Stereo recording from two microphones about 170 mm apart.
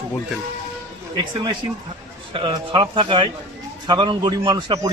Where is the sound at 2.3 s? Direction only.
30° right (ahead or behind).